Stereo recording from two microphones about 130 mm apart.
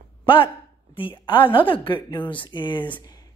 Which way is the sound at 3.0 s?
30° left (ahead or behind).